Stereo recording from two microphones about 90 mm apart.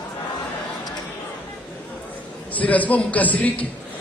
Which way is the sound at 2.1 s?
15° left (ahead or behind).